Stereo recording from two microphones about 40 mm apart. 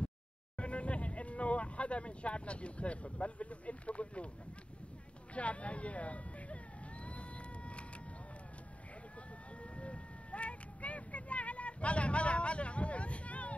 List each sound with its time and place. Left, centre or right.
0.6 s speech: left
5.3 s vehicle: left
9.8 s vehicle: left